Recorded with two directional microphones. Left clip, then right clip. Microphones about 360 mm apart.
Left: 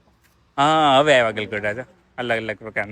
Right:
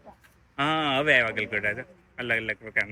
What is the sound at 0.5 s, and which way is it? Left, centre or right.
A man's voice, centre.